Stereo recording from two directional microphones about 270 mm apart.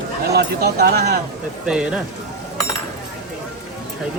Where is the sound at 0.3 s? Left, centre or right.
Right.